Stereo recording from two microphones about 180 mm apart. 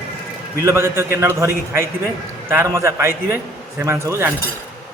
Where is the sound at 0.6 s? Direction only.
15° right (ahead or behind).